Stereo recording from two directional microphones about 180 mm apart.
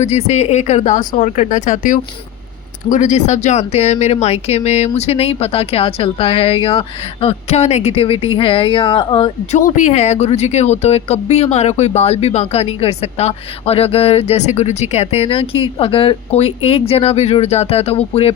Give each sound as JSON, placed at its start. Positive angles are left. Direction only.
{"t": 0.0, "sound": "speech", "side_deg": 35}
{"t": 9.6, "sound": "speech", "side_deg": 45}